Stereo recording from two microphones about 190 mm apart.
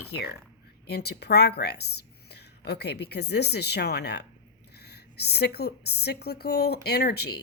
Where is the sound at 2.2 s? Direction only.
60° left (ahead or behind).